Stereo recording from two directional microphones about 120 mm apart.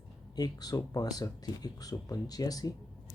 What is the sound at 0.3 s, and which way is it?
Speech, 35° left (ahead or behind).